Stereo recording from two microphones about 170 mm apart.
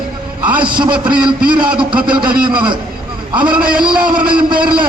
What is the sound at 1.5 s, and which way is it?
Speech, 30° right (ahead or behind).